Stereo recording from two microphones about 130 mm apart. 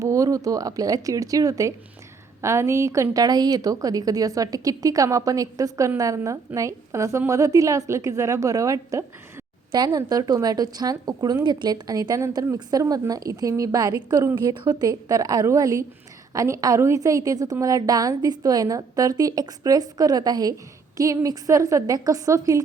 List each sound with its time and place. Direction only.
0.0 s a woman's voice: 25° right (ahead or behind)